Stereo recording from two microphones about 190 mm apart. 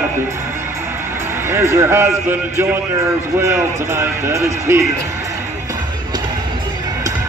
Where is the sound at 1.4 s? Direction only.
15° right (ahead or behind).